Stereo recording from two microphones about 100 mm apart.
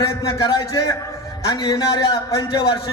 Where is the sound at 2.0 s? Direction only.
55° left (ahead or behind).